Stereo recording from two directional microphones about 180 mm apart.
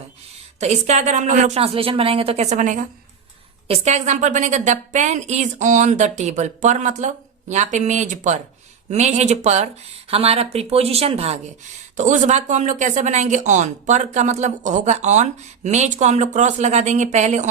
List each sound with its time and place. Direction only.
0.6 s speech: 40° right (ahead or behind)